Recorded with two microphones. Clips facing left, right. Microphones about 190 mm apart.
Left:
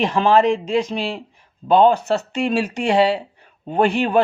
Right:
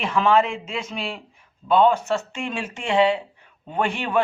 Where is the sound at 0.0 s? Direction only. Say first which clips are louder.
Left 4 dB; 35° left (ahead or behind).